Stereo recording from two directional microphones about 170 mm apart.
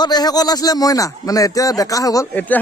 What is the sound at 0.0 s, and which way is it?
Speech, 25° left (ahead or behind).